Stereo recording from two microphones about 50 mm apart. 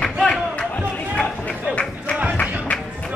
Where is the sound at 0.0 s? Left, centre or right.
Centre.